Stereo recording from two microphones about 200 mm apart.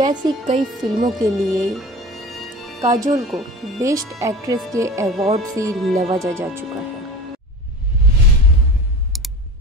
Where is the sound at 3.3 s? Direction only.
Centre (ahead or behind).